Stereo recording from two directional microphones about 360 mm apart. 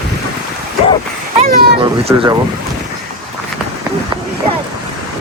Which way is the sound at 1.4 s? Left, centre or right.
Centre.